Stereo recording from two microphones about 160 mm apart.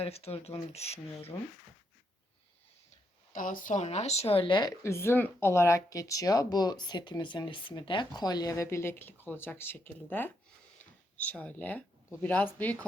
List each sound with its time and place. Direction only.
0.0 s speech: 40° left (ahead or behind)
1.3 s speech: 20° left (ahead or behind)
3.3 s speech: 55° left (ahead or behind); by 4.7 s 30° left (ahead or behind)
4.8 s speech: 15° left (ahead or behind)